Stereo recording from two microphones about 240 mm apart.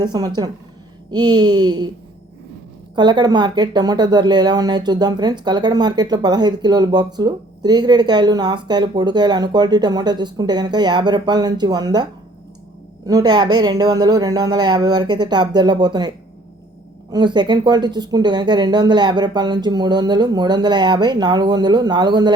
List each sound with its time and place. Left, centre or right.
0.0 s a woman's voice: centre
2.9 s a woman's voice: centre
13.1 s a woman's voice: centre